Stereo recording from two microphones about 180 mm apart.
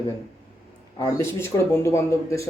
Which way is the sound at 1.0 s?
15° left (ahead or behind).